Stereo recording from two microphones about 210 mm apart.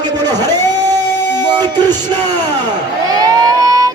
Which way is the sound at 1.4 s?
20° right (ahead or behind).